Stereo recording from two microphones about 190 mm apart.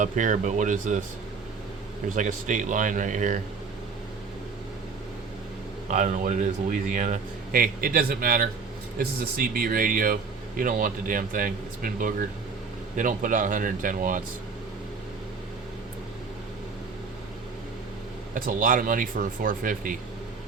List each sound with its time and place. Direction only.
0.0 s speech: 40° right (ahead or behind)
2.0 s a man's voice: 45° right (ahead or behind)
5.9 s a man's voice: 40° right (ahead or behind)
18.3 s a man's voice: 45° right (ahead or behind)